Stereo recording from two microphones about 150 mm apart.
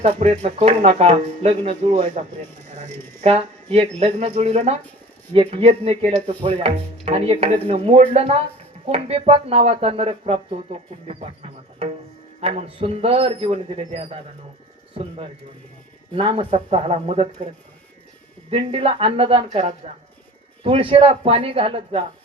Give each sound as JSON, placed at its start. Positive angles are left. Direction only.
{"t": 0.0, "sound": "speech", "side_deg": -45}
{"t": 12.4, "sound": "a man's voice", "side_deg": -40}
{"t": 16.1, "sound": "a man's voice", "side_deg": -35}
{"t": 18.5, "sound": "a man's voice", "side_deg": -40}